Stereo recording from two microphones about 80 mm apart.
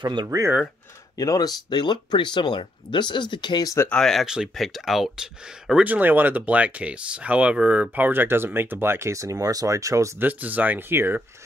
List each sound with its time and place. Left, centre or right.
0.0 s speech: right
1.1 s speech: left
1.7 s speech: left
3.6 s speech: left
3.9 s speech: centre
5.9 s speech: right
10.1 s speech: right